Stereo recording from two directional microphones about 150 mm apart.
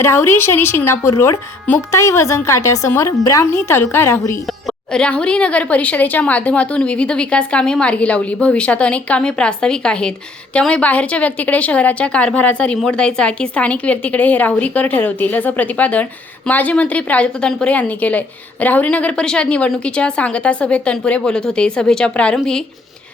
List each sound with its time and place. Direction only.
0.0 s a woman's voice: 15° left (ahead or behind)
4.6 s a woman's voice: 5° left (ahead or behind)